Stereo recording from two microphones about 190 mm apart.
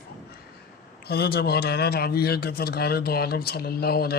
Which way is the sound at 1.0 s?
55° left (ahead or behind).